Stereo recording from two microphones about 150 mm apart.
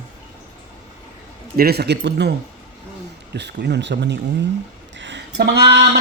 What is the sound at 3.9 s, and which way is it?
Speech, 90° right.